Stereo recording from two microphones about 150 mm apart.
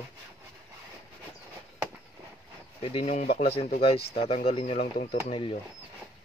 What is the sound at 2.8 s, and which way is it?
Speech, 40° left (ahead or behind).